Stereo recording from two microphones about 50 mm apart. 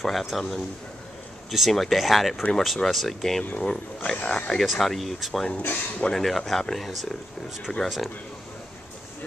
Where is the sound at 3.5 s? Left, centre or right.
Centre.